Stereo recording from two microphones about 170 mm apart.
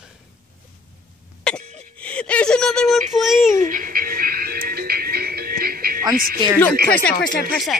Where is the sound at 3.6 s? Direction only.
55° right (ahead or behind).